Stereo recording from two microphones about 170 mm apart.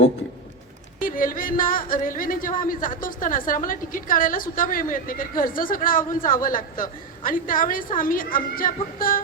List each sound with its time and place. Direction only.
0.9 s a woman's voice: 55° left (ahead or behind)